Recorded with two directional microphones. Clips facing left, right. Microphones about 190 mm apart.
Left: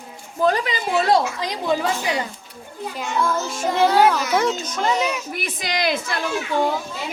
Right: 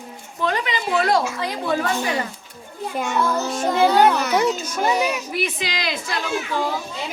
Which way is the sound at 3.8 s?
Centre (ahead or behind).